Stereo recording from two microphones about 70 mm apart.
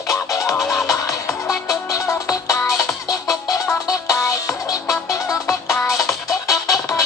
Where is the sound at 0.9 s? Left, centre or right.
Left.